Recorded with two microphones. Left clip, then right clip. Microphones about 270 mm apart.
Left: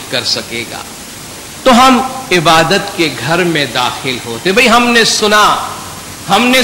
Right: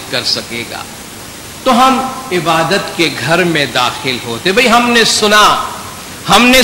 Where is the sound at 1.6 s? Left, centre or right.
Left.